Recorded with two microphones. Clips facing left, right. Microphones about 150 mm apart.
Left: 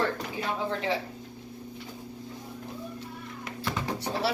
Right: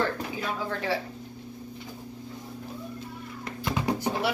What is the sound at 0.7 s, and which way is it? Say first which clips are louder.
Speech: even; 20° left (ahead or behind).